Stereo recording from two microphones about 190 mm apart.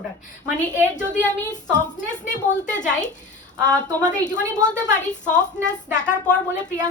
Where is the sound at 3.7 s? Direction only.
5° left (ahead or behind).